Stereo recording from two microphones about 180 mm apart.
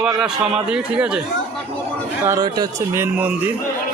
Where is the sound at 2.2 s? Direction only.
20° right (ahead or behind).